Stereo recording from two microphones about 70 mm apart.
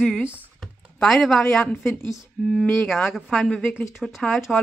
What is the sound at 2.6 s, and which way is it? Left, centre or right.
Speech, centre.